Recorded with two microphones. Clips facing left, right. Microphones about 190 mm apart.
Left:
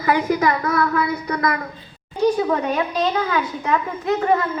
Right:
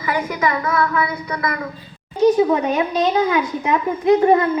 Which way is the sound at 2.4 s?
10° right (ahead or behind).